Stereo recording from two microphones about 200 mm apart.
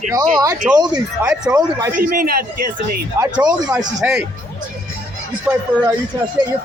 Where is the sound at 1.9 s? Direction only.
45° right (ahead or behind).